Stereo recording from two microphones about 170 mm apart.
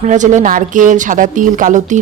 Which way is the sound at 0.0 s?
45° right (ahead or behind).